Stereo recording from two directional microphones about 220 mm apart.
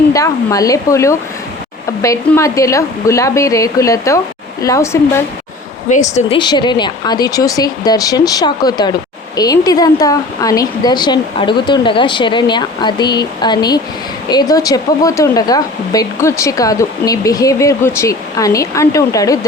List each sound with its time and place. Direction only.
0.1 s speech: 15° left (ahead or behind)
5.9 s speech: 30° left (ahead or behind)
6.4 s speech: 20° left (ahead or behind)